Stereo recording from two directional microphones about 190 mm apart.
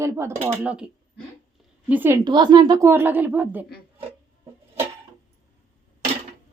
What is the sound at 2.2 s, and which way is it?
A woman's voice, 25° right (ahead or behind).